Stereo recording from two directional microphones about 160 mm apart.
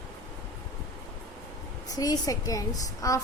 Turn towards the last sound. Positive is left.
turn(degrees=20)  # may be behind; listen again after turning